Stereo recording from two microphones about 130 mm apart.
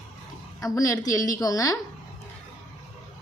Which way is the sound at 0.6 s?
25° left (ahead or behind).